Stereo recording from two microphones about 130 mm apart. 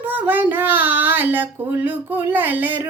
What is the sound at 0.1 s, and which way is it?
Child singing, 15° right (ahead or behind).